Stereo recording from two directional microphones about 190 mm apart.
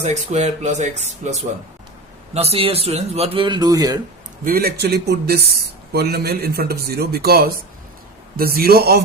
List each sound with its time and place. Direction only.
0.0 s speech: 35° right (ahead or behind); by 4.0 s 20° right (ahead or behind)
4.4 s a man's voice: 55° right (ahead or behind)